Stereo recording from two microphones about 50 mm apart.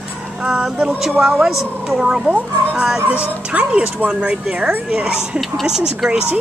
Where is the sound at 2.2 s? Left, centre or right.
Right.